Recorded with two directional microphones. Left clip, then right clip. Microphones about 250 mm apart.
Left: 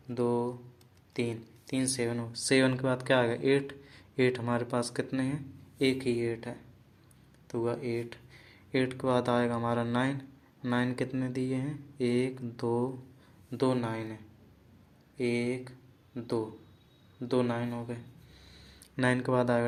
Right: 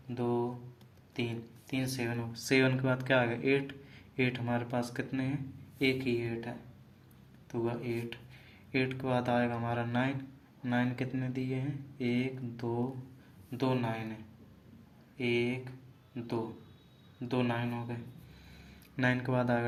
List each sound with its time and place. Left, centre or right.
0.1 s speech: left
15.2 s speech: left
18.9 s speech: left